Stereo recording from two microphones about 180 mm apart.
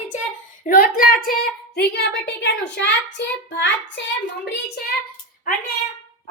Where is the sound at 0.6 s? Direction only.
55° left (ahead or behind).